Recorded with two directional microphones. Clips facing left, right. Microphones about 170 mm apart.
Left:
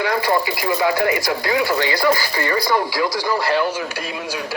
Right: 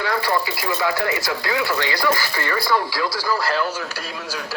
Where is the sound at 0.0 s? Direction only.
20° left (ahead or behind).